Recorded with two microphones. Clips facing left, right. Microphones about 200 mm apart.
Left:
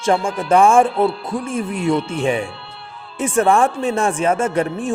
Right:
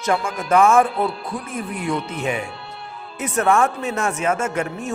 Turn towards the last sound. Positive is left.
turn(degrees=30)  # may be behind; listen again after turning